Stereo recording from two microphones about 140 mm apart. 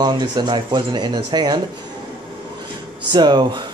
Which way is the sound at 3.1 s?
30° right (ahead or behind).